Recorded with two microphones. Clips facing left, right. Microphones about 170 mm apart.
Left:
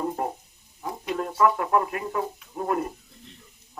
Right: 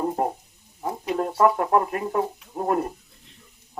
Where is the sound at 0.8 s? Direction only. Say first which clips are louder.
Right 4 dB; 35° right (ahead or behind).